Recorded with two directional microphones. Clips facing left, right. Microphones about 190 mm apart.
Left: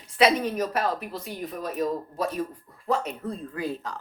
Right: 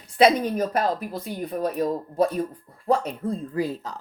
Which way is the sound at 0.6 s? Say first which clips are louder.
Right 3 dB; 35° right (ahead or behind).